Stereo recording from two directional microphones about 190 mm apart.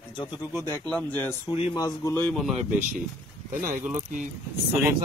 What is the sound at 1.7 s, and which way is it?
Speech, 15° left (ahead or behind).